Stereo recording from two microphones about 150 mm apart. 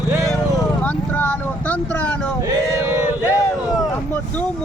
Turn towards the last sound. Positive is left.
turn(degrees=25)  # may be behind; listen again after turning